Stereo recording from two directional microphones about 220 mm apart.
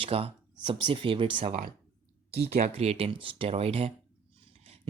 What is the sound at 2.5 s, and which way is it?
Speech, 30° right (ahead or behind).